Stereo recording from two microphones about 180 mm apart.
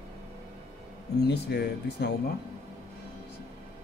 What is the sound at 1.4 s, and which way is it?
Speech, 65° left (ahead or behind).